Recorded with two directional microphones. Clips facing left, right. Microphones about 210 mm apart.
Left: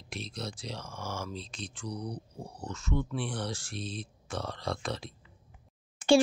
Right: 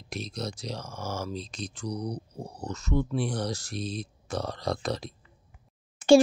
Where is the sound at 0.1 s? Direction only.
40° right (ahead or behind).